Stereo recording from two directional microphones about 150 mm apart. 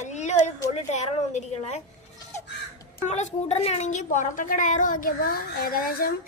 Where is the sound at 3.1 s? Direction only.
50° left (ahead or behind); by 6.1 s 80° left.